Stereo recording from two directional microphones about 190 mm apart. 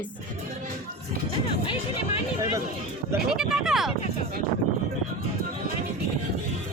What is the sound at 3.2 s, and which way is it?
Speech, centre (ahead or behind).